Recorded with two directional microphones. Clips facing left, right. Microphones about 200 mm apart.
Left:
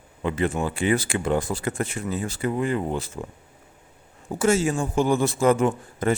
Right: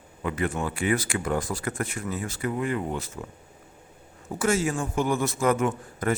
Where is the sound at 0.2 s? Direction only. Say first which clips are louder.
Left 3 dB; 25° left (ahead or behind).